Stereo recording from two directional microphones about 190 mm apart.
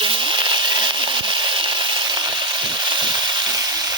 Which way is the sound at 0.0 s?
25° right (ahead or behind).